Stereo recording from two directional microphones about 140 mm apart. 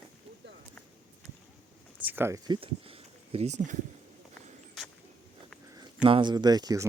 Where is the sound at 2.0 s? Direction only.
15° right (ahead or behind).